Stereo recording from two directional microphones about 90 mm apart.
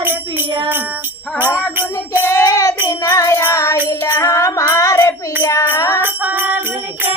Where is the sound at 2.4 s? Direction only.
40° left (ahead or behind).